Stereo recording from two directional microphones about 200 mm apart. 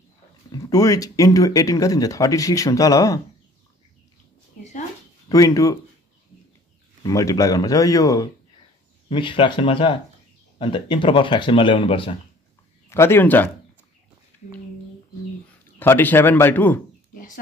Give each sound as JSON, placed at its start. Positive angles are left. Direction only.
{"t": 0.5, "sound": "speech", "side_deg": 15}
{"t": 5.3, "sound": "speech", "side_deg": 15}
{"t": 7.0, "sound": "speech", "side_deg": 15}
{"t": 12.9, "sound": "speech", "side_deg": 10}
{"t": 15.8, "sound": "speech", "side_deg": 10}
{"t": 17.1, "sound": "a sound", "side_deg": 45}